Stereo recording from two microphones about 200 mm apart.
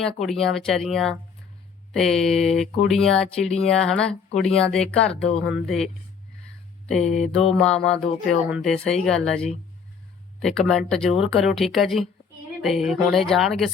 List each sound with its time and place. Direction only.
0.0 s speech: centre (ahead or behind)
7.0 s mantra: 35° left (ahead or behind)
7.5 s speech: 5° left (ahead or behind)